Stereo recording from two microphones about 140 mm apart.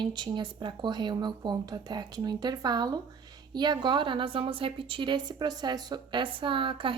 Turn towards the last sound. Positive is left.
turn(degrees=-40)  # may be behind; listen again after turning